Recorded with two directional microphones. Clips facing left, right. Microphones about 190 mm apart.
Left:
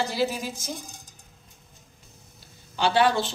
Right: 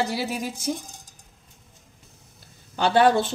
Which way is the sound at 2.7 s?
50° right (ahead or behind).